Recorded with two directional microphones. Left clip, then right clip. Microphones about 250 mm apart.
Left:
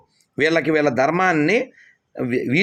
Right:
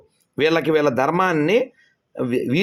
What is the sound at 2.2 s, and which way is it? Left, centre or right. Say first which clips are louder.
Speech: even; right.